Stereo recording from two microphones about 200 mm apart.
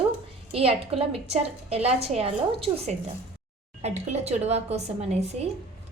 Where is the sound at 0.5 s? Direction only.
30° right (ahead or behind).